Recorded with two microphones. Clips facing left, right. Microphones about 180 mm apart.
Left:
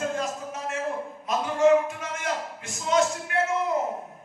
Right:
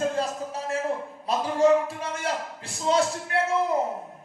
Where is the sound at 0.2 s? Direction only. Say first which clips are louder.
Right 2 dB; 35° right (ahead or behind).